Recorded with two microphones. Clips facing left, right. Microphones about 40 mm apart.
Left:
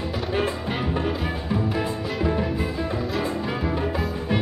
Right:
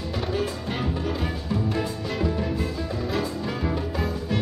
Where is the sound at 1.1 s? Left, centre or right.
Centre.